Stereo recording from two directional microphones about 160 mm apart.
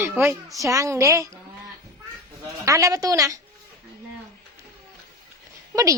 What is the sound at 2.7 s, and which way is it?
Speech, 20° right (ahead or behind).